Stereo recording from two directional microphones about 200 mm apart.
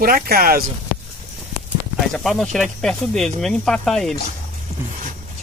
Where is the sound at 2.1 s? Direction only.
Centre (ahead or behind).